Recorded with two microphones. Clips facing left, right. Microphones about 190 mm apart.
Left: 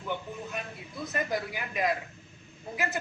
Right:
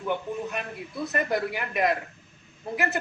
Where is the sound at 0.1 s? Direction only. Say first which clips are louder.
Right 6 dB; 65° right (ahead or behind).